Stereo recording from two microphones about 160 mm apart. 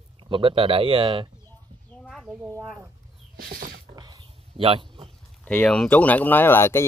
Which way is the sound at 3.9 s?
25° right (ahead or behind).